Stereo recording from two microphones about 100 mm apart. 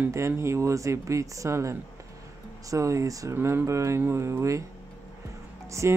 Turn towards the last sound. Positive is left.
turn(degrees=-30)  # may be behind; listen again after turning